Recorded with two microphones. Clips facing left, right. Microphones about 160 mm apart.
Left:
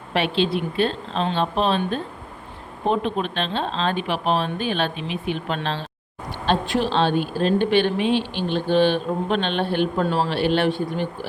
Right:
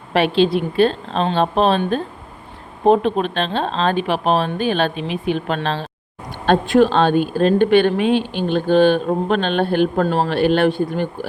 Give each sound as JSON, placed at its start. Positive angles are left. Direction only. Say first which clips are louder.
{"t": 0.1, "sound": "a woman's voice", "louder": "right 6 dB", "side_deg": -40}